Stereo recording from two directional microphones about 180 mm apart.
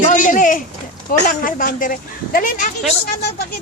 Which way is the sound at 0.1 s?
45° left (ahead or behind).